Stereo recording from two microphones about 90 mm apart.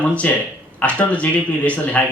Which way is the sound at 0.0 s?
15° left (ahead or behind).